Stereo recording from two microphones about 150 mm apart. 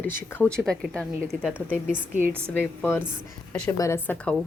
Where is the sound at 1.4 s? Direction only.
10° right (ahead or behind).